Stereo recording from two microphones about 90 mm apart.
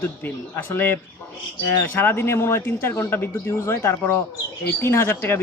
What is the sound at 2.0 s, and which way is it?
Speech, 25° left (ahead or behind).